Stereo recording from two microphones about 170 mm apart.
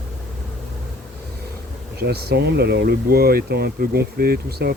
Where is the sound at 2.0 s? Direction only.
70° right (ahead or behind).